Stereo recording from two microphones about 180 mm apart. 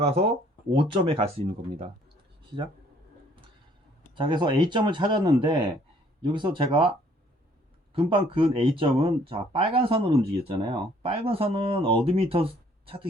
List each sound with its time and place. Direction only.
0.0 s speech: 35° right (ahead or behind)
4.1 s speech: 25° right (ahead or behind)
7.9 s speech: 30° right (ahead or behind)